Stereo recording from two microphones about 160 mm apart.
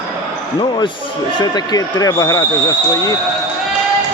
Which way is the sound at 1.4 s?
25° left (ahead or behind).